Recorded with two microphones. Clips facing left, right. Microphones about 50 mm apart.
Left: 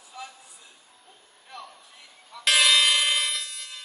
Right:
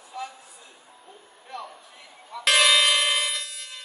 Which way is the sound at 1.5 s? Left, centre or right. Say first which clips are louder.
Right 5 dB; centre.